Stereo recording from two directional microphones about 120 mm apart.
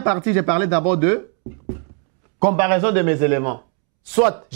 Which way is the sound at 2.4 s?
10° right (ahead or behind).